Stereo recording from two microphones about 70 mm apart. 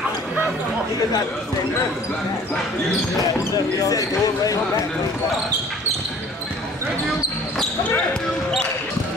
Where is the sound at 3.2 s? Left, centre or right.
Left.